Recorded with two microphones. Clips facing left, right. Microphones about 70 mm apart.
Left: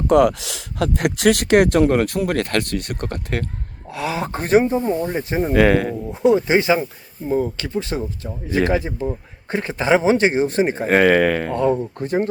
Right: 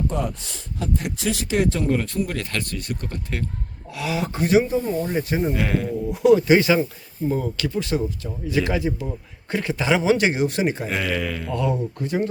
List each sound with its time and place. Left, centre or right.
0.1 s speech: left
3.9 s a man's voice: left
5.0 s speech: left
5.5 s speech: left
6.1 s a man's voice: left
10.8 s speech: left
11.5 s a man's voice: left